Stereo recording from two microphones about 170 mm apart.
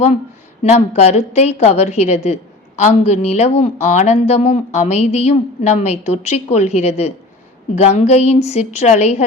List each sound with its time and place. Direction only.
0.6 s a woman's voice: 40° left (ahead or behind)